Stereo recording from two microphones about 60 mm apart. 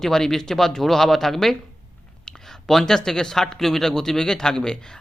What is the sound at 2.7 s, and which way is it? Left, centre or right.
Speech, centre.